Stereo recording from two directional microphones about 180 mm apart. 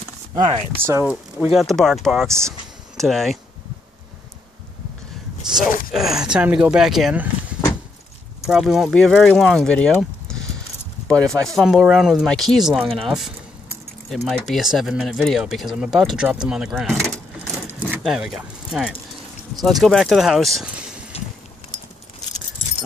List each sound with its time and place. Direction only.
0.5 s speech: 15° right (ahead or behind)
1.4 s speech: centre (ahead or behind)
2.2 s speech: 15° right (ahead or behind)
3.0 s speech: centre (ahead or behind)
5.4 s a sound: 5° right (ahead or behind)
5.9 s speech: centre (ahead or behind)